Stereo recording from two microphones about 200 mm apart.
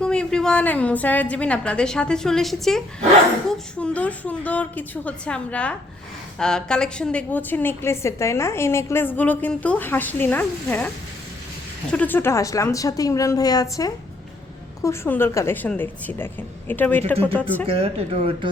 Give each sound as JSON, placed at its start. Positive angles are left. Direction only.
{"t": 0.0, "sound": "a woman's voice", "side_deg": 5}
{"t": 17.7, "sound": "speech", "side_deg": -30}